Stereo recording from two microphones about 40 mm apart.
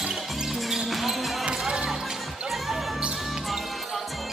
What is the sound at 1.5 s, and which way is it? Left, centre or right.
Music, right.